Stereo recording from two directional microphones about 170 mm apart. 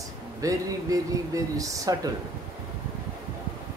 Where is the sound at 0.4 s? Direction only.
20° right (ahead or behind).